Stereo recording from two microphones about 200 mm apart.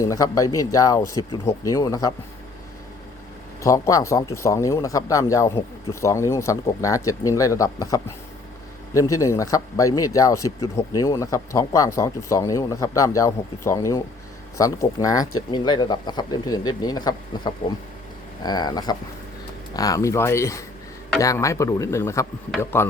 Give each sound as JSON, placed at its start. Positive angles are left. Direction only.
{"t": 0.0, "sound": "speech", "side_deg": 15}
{"t": 3.6, "sound": "speech", "side_deg": 15}